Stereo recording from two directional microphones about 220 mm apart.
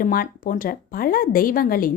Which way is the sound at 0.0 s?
40° left (ahead or behind).